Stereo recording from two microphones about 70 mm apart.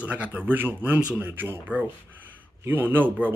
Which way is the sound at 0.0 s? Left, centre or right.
Right.